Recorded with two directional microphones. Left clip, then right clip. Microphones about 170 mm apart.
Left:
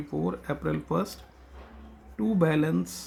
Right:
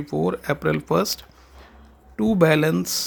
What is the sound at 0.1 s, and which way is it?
Speech, 60° right (ahead or behind).